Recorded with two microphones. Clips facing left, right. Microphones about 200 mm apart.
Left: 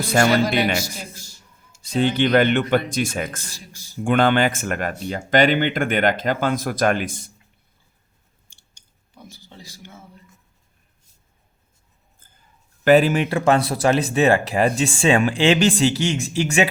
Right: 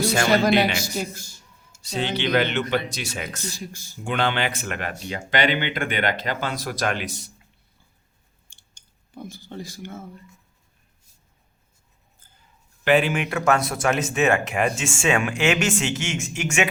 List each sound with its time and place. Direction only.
0.0 s a sound: 55° left (ahead or behind)
0.8 s speech: 55° right (ahead or behind)
1.8 s speech: 50° left (ahead or behind)
3.7 s speech: 50° right (ahead or behind)
4.0 s speech: 50° left (ahead or behind)
9.1 s speech: 55° right (ahead or behind)
12.8 s speech: 40° left (ahead or behind)